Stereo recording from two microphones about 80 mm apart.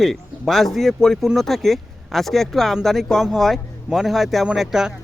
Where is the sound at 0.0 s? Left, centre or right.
Centre.